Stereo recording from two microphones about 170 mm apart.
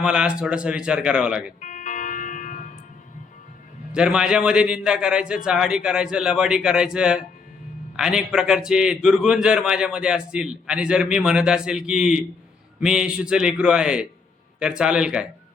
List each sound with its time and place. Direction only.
0.0 s a man's voice: 5° right (ahead or behind)
1.6 s music: 45° left (ahead or behind)
3.9 s a man's voice: 5° right (ahead or behind)